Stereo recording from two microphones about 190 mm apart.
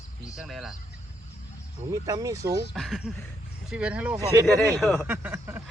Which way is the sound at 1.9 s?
20° right (ahead or behind).